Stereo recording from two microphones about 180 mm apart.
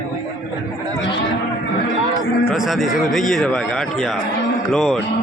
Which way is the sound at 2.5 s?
Centre (ahead or behind).